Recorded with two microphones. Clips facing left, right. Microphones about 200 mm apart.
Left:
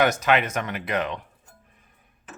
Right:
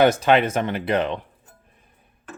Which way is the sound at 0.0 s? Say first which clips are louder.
Right 5 dB; 30° right (ahead or behind).